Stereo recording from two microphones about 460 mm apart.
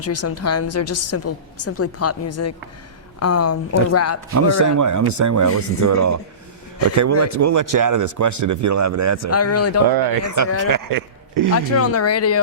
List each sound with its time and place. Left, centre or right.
0.0 s a woman's voice: left
4.4 s speech: right
9.3 s a woman's voice: left
9.9 s speech: right
11.5 s a woman's voice: left